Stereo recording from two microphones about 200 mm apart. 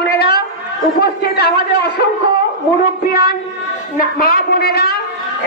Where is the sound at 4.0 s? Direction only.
45° left (ahead or behind).